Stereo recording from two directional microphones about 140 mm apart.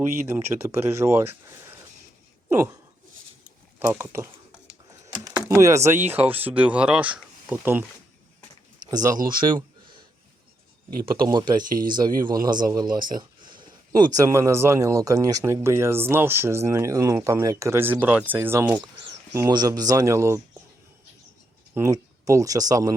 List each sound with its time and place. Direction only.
0.6 s speech: 20° right (ahead or behind)
3.8 s speech: 20° right (ahead or behind)
5.0 s a sound: 30° right (ahead or behind)
5.5 s speech: 20° right (ahead or behind)
8.9 s speech: 25° right (ahead or behind)
11.0 s speech: 35° right (ahead or behind)
11.6 s speech: 80° right
11.9 s speech: 30° right (ahead or behind)
21.8 s speech: 25° right (ahead or behind)